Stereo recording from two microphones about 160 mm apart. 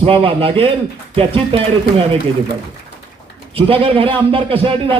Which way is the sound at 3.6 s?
35° right (ahead or behind).